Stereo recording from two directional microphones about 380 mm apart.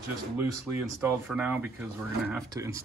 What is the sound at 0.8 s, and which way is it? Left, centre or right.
Speech, centre.